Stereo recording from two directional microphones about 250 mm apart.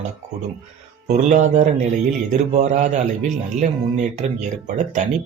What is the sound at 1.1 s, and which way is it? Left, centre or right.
Speech, right.